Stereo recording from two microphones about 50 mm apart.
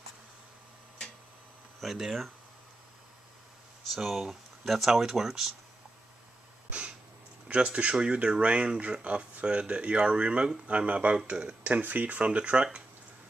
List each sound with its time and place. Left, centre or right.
1.8 s speech: centre
3.9 s speech: centre
7.4 s speech: right
11.8 s speech: right